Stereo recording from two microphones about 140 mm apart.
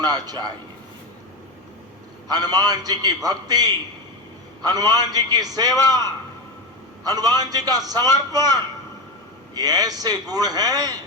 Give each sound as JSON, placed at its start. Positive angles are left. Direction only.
{"t": 0.0, "sound": "a man's voice", "side_deg": -30}
{"t": 2.3, "sound": "a man's voice", "side_deg": -30}
{"t": 7.0, "sound": "a man's voice", "side_deg": -25}